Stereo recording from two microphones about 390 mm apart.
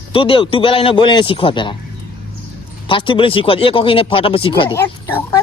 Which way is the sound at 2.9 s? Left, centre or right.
Centre.